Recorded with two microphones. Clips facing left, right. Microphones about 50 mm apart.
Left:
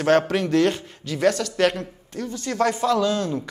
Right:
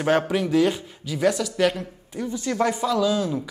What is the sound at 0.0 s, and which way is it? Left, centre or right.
Speech, centre.